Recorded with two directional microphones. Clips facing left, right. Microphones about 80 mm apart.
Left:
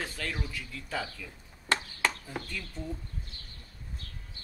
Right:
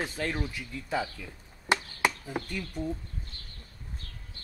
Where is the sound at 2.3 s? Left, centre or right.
Right.